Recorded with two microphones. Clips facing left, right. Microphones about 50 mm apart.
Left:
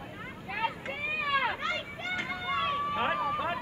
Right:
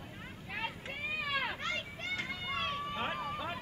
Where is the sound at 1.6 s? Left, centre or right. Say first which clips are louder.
Left 5 dB; centre.